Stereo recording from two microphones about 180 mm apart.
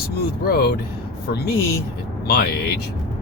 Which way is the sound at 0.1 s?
60° left (ahead or behind).